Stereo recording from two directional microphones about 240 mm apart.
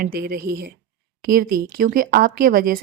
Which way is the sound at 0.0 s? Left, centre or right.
Right.